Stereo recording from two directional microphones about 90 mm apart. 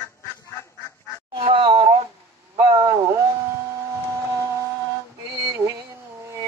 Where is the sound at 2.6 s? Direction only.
55° right (ahead or behind).